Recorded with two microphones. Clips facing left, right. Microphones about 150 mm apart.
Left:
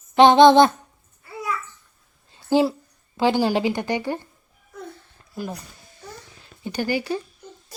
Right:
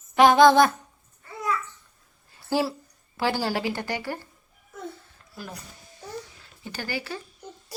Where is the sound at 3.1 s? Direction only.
20° left (ahead or behind).